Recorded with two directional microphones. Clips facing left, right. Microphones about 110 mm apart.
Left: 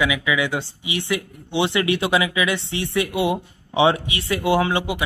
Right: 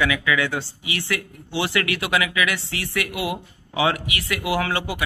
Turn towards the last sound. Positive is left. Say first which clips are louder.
# left 4 dB
turn(degrees=20)  # may be behind; listen again after turning